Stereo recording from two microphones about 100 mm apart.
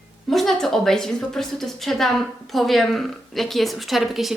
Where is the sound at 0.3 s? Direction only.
5° left (ahead or behind).